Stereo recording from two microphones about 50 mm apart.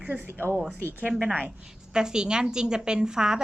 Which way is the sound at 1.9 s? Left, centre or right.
Centre.